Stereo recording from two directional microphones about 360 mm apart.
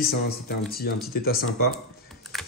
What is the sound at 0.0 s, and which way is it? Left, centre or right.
A man's voice, left.